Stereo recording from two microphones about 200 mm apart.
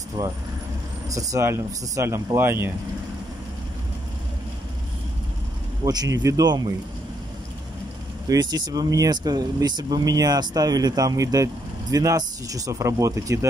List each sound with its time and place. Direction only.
0.2 s speech: 15° right (ahead or behind)
5.9 s speech: 20° right (ahead or behind)
8.3 s speech: 20° right (ahead or behind)